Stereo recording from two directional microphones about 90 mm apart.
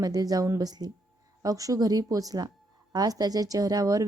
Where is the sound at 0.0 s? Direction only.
45° right (ahead or behind).